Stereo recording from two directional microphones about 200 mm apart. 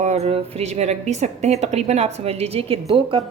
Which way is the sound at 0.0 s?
35° right (ahead or behind).